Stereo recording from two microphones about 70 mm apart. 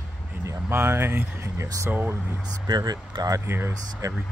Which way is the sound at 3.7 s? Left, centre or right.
Right.